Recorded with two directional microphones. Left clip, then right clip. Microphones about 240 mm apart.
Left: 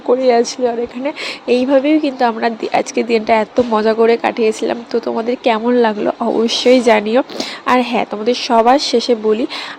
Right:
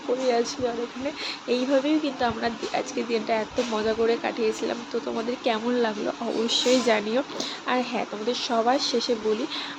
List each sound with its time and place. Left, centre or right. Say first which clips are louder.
0.3 s speech: left 11 dB; left